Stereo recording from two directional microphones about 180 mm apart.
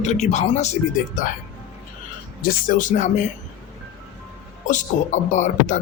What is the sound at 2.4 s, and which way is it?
Speech, 50° left (ahead or behind).